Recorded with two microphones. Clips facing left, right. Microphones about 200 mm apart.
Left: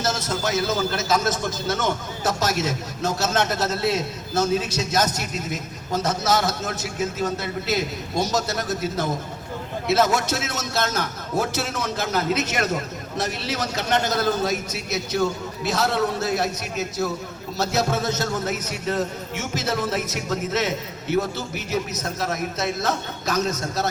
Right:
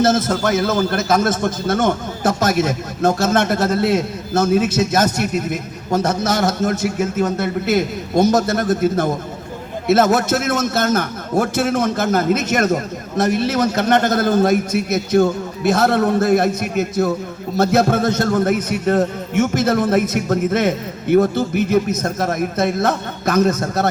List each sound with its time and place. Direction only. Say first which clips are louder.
0.0 s a man's voice: right 9 dB; 55° right (ahead or behind)